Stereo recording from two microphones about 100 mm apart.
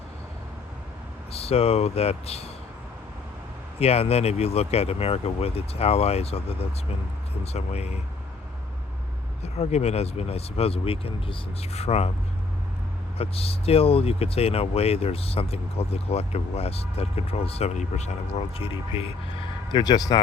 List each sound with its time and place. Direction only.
1.3 s speech: 85° left
3.8 s speech: 90° left
7.4 s speech: 90° left
9.4 s speech: 90° left
13.1 s speech: 80° left
19.7 s speech: 40° left (ahead or behind)